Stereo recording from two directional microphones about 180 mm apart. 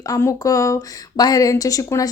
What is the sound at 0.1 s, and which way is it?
Speech, 15° left (ahead or behind).